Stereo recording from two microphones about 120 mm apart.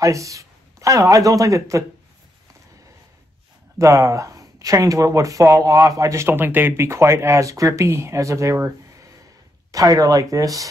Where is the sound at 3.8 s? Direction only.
25° right (ahead or behind).